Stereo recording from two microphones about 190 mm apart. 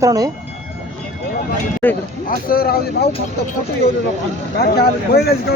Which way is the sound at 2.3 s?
50° left (ahead or behind).